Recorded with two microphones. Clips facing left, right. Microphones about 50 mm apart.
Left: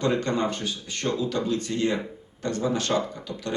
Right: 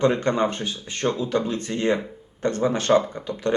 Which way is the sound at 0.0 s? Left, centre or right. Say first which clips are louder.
Right 4 dB; right.